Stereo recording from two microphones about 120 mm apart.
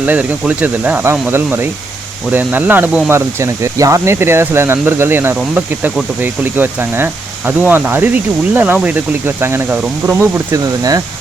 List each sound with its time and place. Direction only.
0.0 s speech: 15° right (ahead or behind)